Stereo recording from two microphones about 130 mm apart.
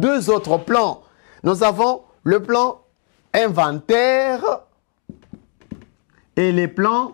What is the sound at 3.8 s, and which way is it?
Music, 5° left (ahead or behind).